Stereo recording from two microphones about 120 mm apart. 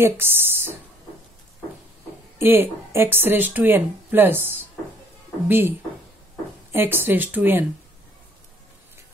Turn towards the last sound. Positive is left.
turn(degrees=-15)  # may be behind; listen again after turning